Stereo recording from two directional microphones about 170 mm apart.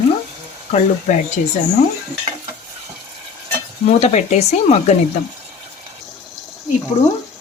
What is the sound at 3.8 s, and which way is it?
Speech, 40° left (ahead or behind).